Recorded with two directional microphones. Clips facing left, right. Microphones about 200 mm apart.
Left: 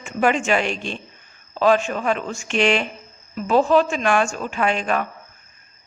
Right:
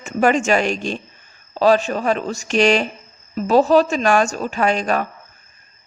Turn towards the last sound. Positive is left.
turn(degrees=-40)  # may be behind; listen again after turning